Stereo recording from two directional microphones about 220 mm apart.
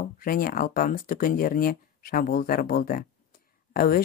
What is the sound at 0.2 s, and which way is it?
Speech, 40° left (ahead or behind).